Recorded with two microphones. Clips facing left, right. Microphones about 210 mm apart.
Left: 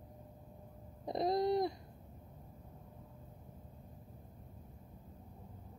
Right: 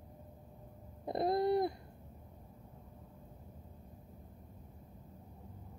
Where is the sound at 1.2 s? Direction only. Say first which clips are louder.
Right 1 dB; 55° right (ahead or behind).